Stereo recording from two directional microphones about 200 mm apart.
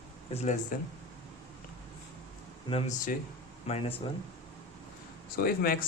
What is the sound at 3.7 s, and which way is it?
Speech, 30° left (ahead or behind).